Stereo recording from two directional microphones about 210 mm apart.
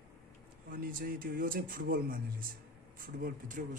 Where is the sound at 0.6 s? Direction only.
45° right (ahead or behind).